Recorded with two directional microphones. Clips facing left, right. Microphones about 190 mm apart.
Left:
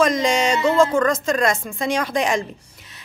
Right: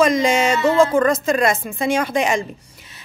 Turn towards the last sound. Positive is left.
turn(degrees=0)  # may be behind; listen again after turning